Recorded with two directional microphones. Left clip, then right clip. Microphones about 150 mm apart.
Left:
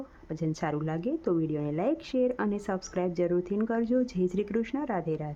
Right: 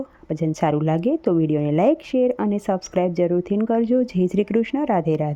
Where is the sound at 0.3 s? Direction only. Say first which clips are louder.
Right 11 dB; 35° right (ahead or behind).